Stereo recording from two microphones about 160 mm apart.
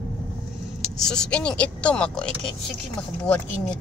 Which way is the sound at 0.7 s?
5° left (ahead or behind).